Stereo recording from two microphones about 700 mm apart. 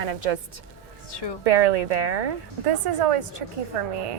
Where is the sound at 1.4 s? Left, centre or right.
Right.